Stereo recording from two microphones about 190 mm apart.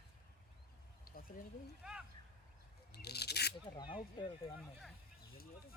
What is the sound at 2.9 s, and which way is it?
Speech, 60° left (ahead or behind).